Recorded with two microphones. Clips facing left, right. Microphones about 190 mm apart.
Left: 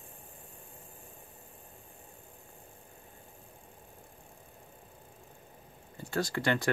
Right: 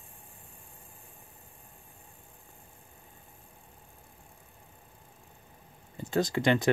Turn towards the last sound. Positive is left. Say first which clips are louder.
# right 4 dB
turn(degrees=-20)  # may be behind; listen again after turning